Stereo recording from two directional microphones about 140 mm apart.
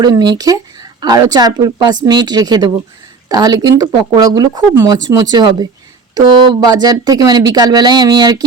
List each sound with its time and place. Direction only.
0.0 s speech: 30° right (ahead or behind)